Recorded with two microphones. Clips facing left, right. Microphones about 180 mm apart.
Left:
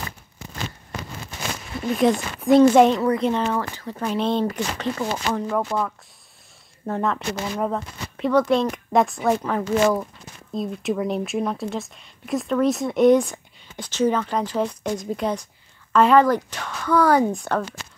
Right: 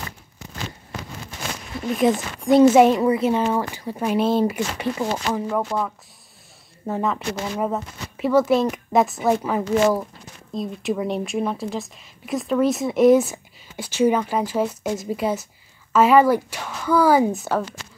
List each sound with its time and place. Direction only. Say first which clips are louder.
2.0 s speech: even; centre (ahead or behind)